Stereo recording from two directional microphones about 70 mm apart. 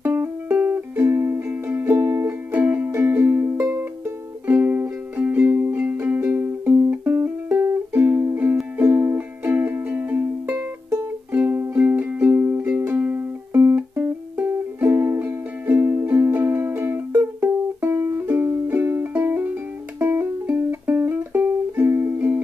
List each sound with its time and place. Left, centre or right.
0.0 s music: right
17.8 s music: right
18.2 s music: right